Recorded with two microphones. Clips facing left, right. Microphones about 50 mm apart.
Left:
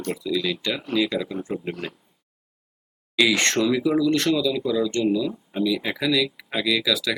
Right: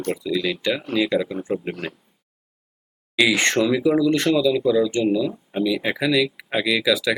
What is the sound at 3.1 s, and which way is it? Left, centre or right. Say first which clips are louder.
Speech: right 2 dB; centre.